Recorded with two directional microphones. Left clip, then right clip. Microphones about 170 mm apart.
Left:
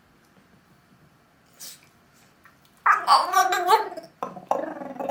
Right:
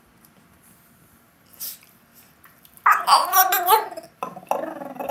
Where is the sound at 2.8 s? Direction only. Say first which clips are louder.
Right 2 dB; centre (ahead or behind).